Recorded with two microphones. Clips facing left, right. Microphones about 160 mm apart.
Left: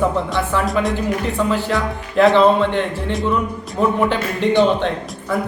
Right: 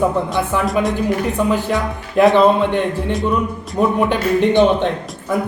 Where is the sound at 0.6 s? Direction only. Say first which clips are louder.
Right 2 dB; centre (ahead or behind).